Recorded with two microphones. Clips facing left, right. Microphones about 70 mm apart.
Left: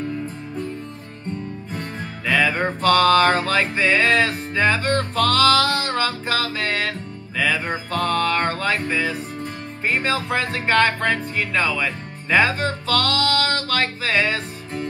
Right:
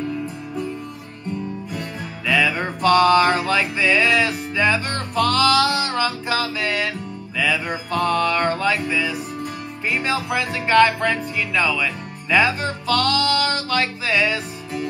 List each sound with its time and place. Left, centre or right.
1.7 s music: left